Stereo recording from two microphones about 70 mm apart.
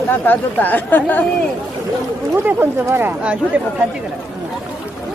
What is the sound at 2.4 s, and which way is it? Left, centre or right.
Speech, right.